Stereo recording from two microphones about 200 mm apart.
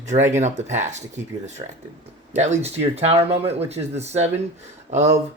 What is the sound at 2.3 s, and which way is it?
Speech, 35° right (ahead or behind).